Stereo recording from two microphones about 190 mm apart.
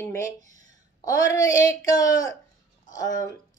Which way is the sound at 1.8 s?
20° left (ahead or behind).